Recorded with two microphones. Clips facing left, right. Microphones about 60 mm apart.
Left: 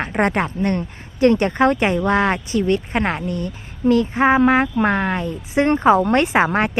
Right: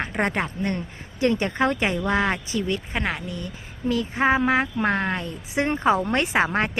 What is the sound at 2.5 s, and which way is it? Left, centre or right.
A woman's voice, left.